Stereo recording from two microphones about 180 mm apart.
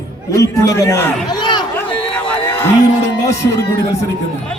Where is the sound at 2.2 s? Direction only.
5° left (ahead or behind).